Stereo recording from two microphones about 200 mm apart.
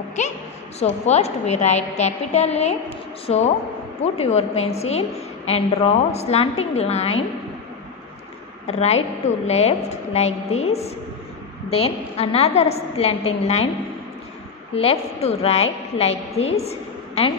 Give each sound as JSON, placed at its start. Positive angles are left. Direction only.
{"t": 0.7, "sound": "a woman's voice", "side_deg": 35}
{"t": 8.6, "sound": "a woman's voice", "side_deg": 30}
{"t": 14.8, "sound": "a woman's voice", "side_deg": 30}